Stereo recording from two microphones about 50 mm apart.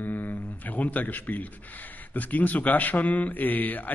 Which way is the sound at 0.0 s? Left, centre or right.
Left.